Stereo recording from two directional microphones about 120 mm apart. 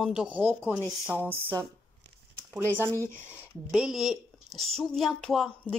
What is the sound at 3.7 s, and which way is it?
Speech, 5° right (ahead or behind).